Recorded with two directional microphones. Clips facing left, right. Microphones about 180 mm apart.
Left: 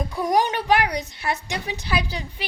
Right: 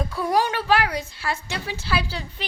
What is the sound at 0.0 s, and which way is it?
A woman's voice, 15° left (ahead or behind).